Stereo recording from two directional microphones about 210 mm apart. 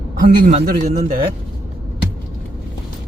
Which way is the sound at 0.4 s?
40° right (ahead or behind).